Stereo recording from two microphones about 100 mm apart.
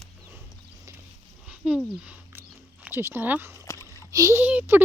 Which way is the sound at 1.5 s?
10° right (ahead or behind).